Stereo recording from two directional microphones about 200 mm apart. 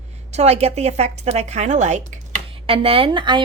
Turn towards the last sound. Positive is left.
turn(degrees=-25)  # may be behind; listen again after turning